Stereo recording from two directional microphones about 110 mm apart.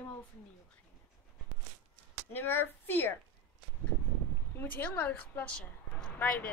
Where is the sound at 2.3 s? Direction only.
20° left (ahead or behind).